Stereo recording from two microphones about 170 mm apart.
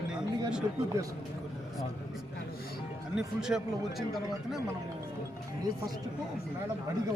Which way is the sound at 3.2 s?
5° right (ahead or behind).